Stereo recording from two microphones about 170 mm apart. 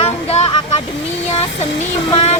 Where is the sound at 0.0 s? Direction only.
35° left (ahead or behind).